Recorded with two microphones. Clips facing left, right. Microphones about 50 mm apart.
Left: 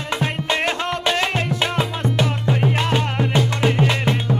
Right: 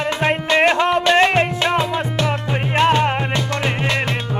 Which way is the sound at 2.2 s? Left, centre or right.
Right.